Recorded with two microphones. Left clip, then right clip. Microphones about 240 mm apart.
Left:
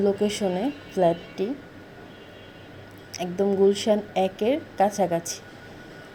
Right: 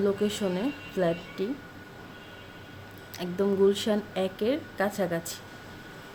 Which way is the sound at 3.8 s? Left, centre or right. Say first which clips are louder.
Left 6 dB; centre.